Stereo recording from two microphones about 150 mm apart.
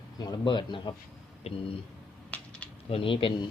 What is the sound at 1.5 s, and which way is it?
Speech, 45° left (ahead or behind).